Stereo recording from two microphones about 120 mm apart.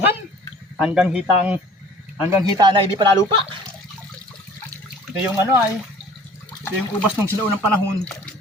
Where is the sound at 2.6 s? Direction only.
40° right (ahead or behind).